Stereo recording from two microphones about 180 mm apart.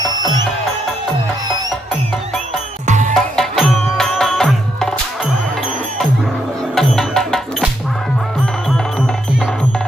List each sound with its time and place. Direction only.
2.8 s music: 40° right (ahead or behind)
3.2 s music: centre (ahead or behind)
6.7 s music: centre (ahead or behind)